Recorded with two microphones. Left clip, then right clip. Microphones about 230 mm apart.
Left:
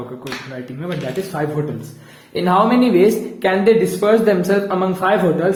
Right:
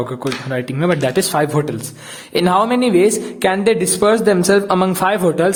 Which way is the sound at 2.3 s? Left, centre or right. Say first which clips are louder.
Right 1 dB; right.